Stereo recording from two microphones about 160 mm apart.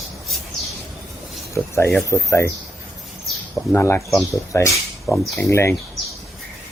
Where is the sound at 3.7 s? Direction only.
15° left (ahead or behind).